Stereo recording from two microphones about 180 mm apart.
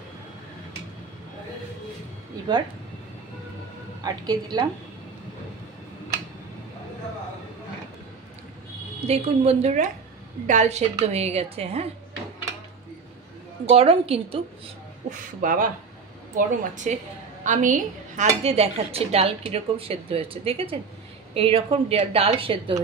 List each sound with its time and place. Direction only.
4.0 s a woman's voice: 20° right (ahead or behind)
9.0 s speech: 35° right (ahead or behind)
13.7 s speech: 35° right (ahead or behind)
15.0 s speech: 50° right (ahead or behind); by 22.8 s 30° right (ahead or behind)